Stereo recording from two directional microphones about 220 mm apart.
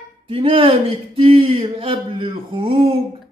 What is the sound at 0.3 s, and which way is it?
Speech, 25° right (ahead or behind).